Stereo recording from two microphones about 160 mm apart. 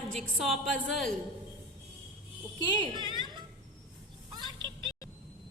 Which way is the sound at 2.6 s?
30° right (ahead or behind).